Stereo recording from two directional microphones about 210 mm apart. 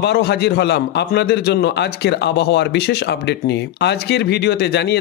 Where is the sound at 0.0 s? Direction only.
50° left (ahead or behind).